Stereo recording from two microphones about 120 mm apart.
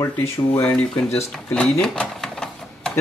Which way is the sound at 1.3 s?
5° left (ahead or behind).